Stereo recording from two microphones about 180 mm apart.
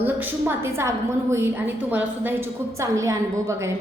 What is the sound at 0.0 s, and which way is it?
A woman's voice, 15° right (ahead or behind).